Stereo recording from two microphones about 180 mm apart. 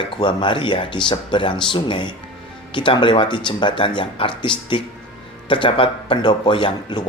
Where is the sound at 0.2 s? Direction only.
25° left (ahead or behind).